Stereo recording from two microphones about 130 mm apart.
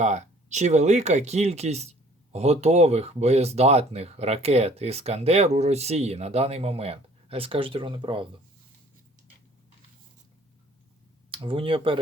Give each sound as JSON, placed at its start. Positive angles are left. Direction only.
{"t": 0.0, "sound": "speech", "side_deg": -65}
{"t": 11.4, "sound": "speech", "side_deg": -45}